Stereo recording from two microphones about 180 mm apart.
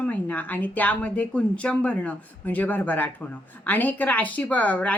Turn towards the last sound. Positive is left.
turn(degrees=10)  # may be behind; listen again after turning